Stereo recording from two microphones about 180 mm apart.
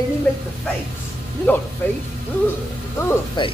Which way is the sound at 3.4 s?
25° left (ahead or behind).